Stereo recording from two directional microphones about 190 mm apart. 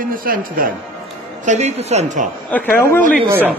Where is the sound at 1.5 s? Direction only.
35° right (ahead or behind).